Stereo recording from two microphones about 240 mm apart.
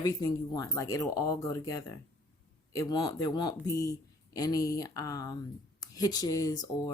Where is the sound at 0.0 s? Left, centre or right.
Centre.